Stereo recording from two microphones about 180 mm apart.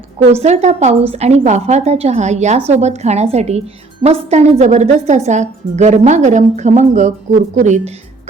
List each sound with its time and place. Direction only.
0.3 s a woman's voice: 40° right (ahead or behind)